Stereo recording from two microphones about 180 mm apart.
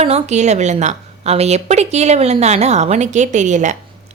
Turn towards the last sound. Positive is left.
turn(degrees=-40)  # may be behind; listen again after turning